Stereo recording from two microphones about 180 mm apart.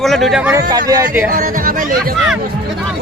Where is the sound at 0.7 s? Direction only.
20° right (ahead or behind).